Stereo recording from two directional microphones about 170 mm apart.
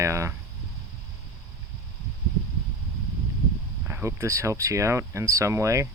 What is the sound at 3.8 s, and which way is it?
Speech, 15° right (ahead or behind).